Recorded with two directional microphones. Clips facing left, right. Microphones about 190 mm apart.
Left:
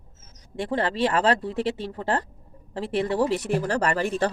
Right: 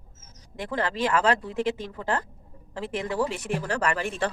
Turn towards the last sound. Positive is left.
turn(degrees=40)  # may be behind; listen again after turning